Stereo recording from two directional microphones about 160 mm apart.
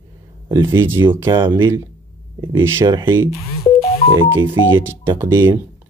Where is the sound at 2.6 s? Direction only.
15° right (ahead or behind).